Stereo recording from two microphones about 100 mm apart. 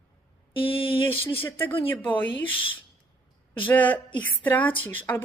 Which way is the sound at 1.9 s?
15° left (ahead or behind).